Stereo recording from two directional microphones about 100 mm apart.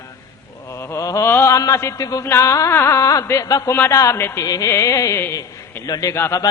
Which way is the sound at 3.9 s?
35° left (ahead or behind).